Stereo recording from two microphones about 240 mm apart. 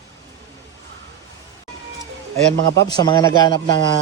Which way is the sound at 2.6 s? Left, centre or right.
Right.